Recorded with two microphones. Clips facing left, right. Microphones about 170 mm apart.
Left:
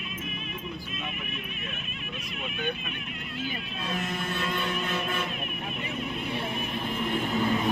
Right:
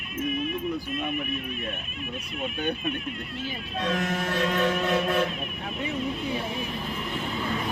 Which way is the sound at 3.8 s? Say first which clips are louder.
Right 6 dB; 75° right (ahead or behind).